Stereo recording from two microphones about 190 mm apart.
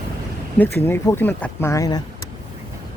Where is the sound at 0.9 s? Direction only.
10° left (ahead or behind).